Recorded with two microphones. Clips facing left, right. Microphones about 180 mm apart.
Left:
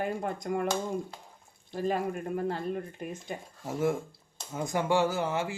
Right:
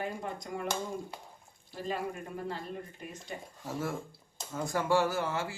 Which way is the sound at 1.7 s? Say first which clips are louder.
Left 6 dB; 50° left (ahead or behind).